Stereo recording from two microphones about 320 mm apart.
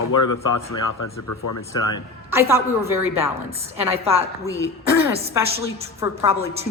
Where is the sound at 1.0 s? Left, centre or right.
Left.